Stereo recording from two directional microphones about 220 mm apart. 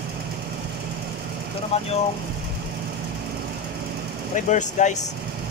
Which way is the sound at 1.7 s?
30° left (ahead or behind).